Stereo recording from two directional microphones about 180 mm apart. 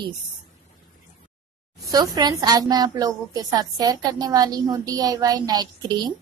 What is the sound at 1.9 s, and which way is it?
A woman's voice, 20° right (ahead or behind).